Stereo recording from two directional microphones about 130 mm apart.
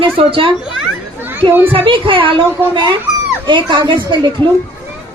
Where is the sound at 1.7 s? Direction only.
40° right (ahead or behind).